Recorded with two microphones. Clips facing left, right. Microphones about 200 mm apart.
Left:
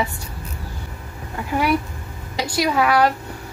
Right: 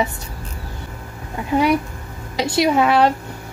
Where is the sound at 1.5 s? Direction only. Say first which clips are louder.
Right 3 dB; 20° right (ahead or behind).